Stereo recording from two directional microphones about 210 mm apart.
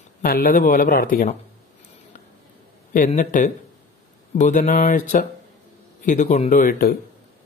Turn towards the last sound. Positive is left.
turn(degrees=45)  # may be behind; listen again after turning